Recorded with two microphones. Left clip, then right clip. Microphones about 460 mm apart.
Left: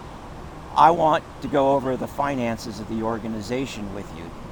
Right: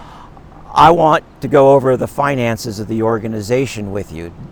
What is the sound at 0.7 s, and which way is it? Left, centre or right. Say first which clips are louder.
Speech: right 7 dB; right.